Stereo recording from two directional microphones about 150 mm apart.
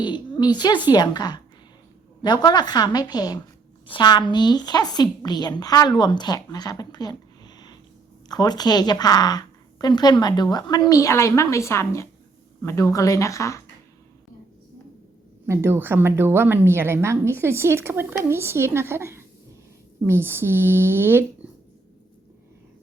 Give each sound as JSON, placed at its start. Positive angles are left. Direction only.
{"t": 0.0, "sound": "a woman's voice", "side_deg": 30}
{"t": 15.4, "sound": "a woman's voice", "side_deg": -15}